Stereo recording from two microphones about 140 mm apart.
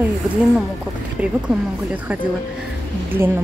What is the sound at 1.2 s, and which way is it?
Speech, 10° right (ahead or behind).